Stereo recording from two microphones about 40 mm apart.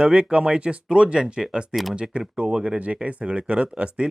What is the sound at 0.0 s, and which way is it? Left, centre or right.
Speech, right.